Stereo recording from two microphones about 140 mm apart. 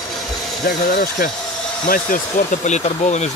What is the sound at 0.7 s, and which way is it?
Speech, 90° left.